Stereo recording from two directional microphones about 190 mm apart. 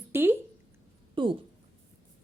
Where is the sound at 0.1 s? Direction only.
10° right (ahead or behind).